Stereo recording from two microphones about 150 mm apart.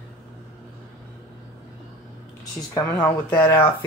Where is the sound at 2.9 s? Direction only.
10° left (ahead or behind).